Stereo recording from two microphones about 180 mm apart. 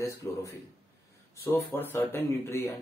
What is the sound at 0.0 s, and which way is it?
Speech, 15° left (ahead or behind).